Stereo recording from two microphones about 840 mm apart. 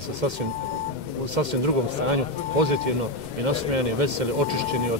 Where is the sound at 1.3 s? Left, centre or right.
Right.